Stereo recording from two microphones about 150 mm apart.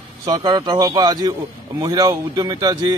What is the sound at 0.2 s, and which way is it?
A man's voice, 25° right (ahead or behind).